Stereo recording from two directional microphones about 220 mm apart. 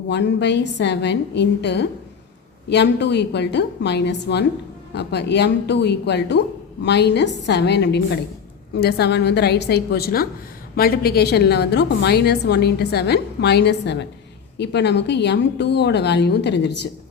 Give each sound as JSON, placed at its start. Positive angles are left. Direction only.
{"t": 0.1, "sound": "a woman's voice", "side_deg": 50}